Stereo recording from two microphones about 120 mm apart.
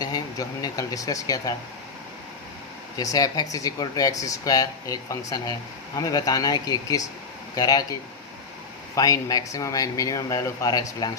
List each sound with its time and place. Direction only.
0.0 s speech: 35° left (ahead or behind)
3.0 s speech: 30° left (ahead or behind)
9.0 s speech: 30° left (ahead or behind)